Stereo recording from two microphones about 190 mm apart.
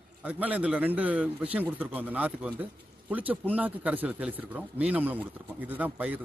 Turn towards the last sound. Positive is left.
turn(degrees=-10)  # may be behind; listen again after turning